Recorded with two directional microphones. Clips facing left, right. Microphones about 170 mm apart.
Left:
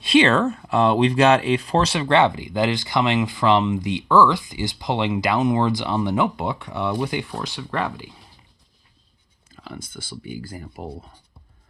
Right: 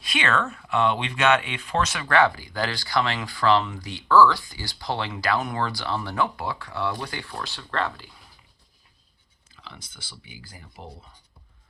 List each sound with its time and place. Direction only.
0.0 s speech: 30° left (ahead or behind)
9.6 s speech: 50° left (ahead or behind)